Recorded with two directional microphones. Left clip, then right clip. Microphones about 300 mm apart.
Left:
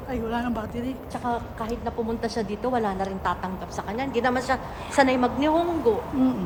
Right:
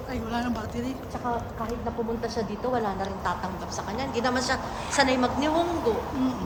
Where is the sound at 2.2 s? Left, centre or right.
Left.